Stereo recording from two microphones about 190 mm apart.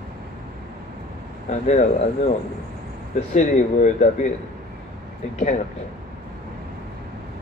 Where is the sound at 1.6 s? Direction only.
40° left (ahead or behind).